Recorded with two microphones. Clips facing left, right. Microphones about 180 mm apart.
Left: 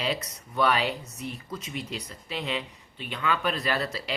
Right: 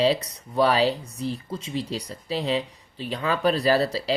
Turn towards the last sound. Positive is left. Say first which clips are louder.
# right 8 dB
turn(degrees=-35)  # may be behind; listen again after turning